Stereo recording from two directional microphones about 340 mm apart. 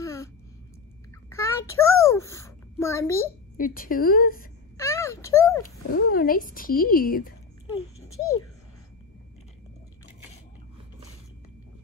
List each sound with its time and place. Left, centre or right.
0.0 s a sound: centre
1.3 s a child's voice: centre
3.5 s speech: left
4.7 s a sound: centre
5.6 s speech: left
8.1 s a child's voice: left